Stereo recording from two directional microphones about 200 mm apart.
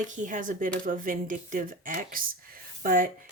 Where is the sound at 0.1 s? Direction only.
40° right (ahead or behind).